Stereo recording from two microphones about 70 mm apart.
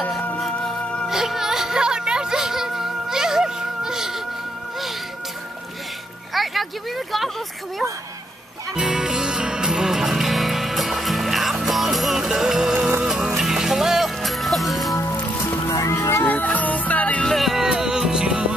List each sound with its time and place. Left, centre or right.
0.4 s music: centre
1.0 s music: centre
6.3 s a sound: centre
8.7 s music: centre
15.4 s music: left
16.3 s music: left
17.3 s music: centre